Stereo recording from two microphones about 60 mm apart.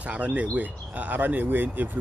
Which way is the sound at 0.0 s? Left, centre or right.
Right.